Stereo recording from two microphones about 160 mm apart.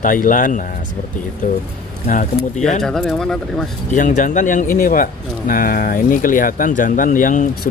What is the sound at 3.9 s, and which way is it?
Speech, 50° left (ahead or behind).